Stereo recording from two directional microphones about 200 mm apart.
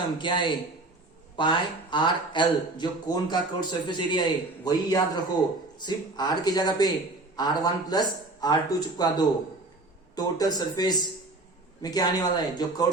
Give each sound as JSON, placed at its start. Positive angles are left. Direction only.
{"t": 0.2, "sound": "speech", "side_deg": 25}